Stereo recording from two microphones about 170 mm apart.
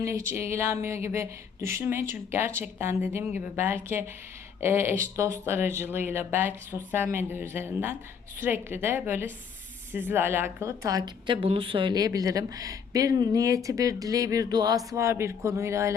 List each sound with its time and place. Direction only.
0.3 s a woman's voice: 15° right (ahead or behind)